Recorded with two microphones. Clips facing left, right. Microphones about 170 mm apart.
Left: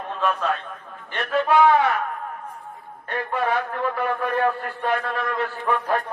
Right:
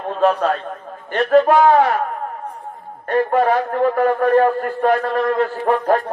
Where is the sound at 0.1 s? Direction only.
60° right (ahead or behind).